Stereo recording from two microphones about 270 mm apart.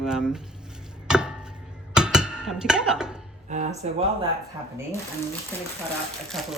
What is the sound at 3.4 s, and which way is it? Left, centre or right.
Speech, right.